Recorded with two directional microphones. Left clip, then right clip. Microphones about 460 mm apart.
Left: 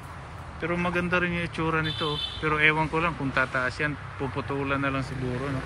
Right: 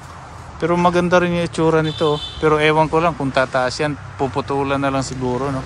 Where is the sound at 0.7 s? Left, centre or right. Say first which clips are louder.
Right 13 dB; right.